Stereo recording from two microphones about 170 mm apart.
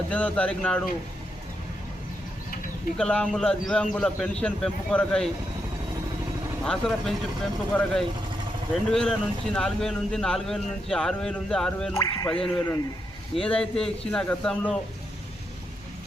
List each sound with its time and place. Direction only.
0.1 s speech: 5° left (ahead or behind)
3.0 s speech: 5° left (ahead or behind)
6.7 s speech: centre (ahead or behind)
11.9 s speech: 15° left (ahead or behind)
13.3 s speech: 5° left (ahead or behind)